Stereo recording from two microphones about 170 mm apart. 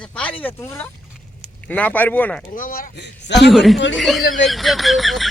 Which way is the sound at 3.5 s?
Centre (ahead or behind).